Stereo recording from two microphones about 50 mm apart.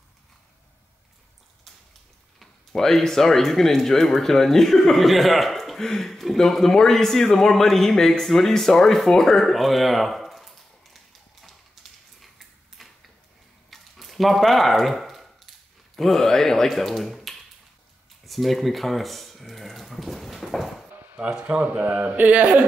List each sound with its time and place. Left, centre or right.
2.3 s speech: centre
13.7 s a sound: centre
16.0 s speech: centre
21.2 s a man's voice: right